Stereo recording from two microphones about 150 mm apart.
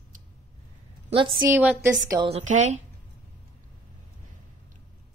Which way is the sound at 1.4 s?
10° right (ahead or behind).